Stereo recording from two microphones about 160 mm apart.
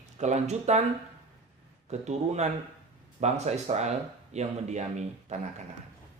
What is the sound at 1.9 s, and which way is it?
A woman's voice, 45° right (ahead or behind).